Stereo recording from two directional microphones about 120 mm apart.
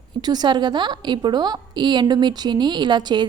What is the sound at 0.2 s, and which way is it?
A woman's voice, 35° right (ahead or behind).